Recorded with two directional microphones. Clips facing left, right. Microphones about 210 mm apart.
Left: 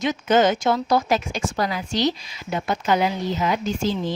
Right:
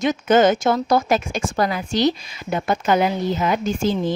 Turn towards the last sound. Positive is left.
turn(degrees=-50)  # may be behind; listen again after turning